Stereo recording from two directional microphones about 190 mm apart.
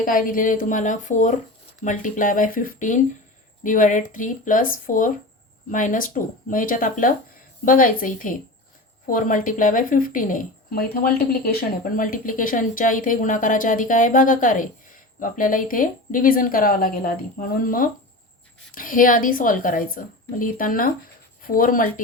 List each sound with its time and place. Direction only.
0.0 s speech: 45° left (ahead or behind)